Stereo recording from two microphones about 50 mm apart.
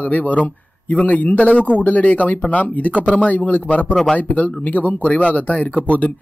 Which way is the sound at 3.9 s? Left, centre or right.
Centre.